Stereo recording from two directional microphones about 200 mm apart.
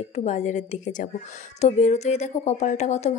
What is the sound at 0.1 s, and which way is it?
Speech, 35° left (ahead or behind).